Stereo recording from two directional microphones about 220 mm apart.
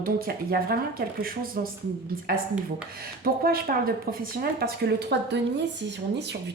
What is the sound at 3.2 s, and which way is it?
Speech, 40° right (ahead or behind).